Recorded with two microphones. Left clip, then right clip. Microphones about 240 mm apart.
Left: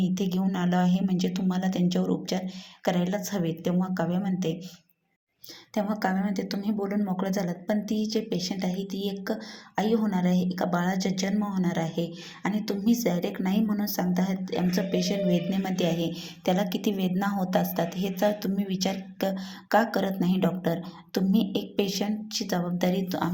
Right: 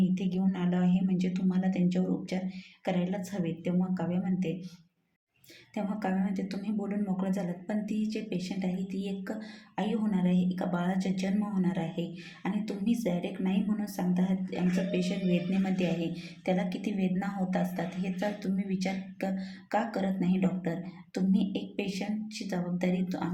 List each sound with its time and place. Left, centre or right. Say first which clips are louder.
0.1 s speech: left 4 dB; centre
5.7 s a woman's voice: left 6 dB; centre
9.7 s a woman's voice: left 6 dB; centre